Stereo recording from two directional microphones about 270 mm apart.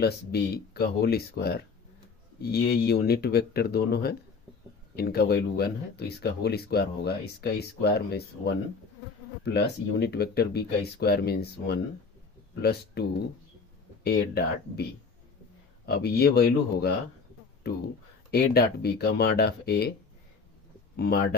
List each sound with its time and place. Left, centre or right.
0.0 s speech: left
13.0 s speech: left
20.9 s speech: left